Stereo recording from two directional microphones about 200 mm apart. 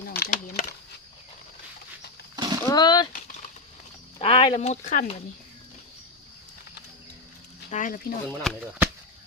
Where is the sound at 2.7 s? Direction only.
20° left (ahead or behind).